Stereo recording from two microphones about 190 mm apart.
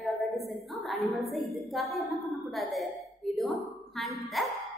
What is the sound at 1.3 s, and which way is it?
A woman's voice, centre (ahead or behind).